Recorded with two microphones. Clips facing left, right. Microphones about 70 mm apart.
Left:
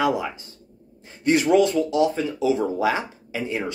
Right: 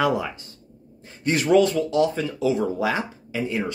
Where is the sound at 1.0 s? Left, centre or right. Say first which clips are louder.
Left 4 dB; left.